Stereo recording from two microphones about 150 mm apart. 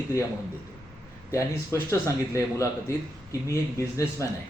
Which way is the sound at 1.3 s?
20° left (ahead or behind).